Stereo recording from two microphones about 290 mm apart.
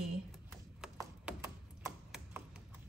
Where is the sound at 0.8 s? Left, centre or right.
Centre.